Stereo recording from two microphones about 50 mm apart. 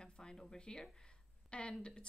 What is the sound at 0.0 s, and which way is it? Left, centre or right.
Speech, centre.